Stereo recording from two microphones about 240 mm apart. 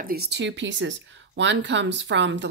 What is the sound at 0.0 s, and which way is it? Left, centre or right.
Speech, right.